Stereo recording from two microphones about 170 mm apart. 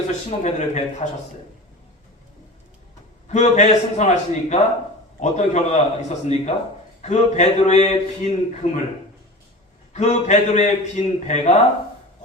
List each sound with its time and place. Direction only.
0.3 s a man's voice: 40° left (ahead or behind)
3.2 s a man's voice: 45° left (ahead or behind)
9.9 s a man's voice: 45° left (ahead or behind)